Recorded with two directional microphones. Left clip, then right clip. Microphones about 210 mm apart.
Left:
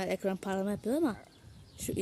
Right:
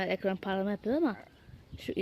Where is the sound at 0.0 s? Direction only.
10° left (ahead or behind).